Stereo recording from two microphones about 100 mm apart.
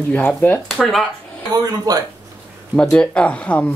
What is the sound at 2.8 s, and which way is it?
Speech, 10° left (ahead or behind).